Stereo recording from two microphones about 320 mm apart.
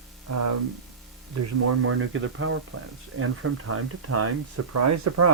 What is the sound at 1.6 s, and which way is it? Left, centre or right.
Speech, right.